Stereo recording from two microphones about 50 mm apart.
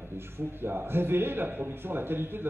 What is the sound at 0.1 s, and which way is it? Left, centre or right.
Speech, right.